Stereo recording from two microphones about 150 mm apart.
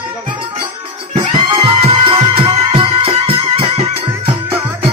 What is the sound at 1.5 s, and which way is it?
Music, 40° right (ahead or behind).